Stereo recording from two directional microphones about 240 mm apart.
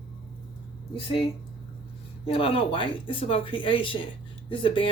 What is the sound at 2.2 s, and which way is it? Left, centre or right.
Speech, left.